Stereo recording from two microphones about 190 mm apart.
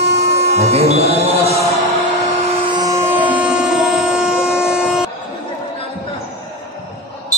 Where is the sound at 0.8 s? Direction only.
35° right (ahead or behind).